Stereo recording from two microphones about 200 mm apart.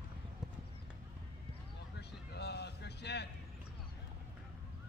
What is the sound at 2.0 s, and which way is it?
Vehicle, 55° left (ahead or behind).